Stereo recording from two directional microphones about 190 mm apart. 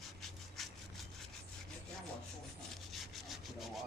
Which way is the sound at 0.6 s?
Centre (ahead or behind).